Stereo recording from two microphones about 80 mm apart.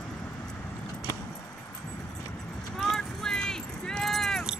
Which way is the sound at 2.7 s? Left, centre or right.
Centre.